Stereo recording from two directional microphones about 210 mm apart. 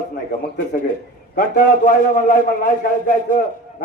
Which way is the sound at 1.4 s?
40° left (ahead or behind).